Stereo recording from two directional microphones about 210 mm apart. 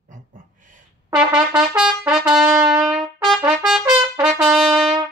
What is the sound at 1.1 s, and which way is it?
Trumpet, 5° right (ahead or behind).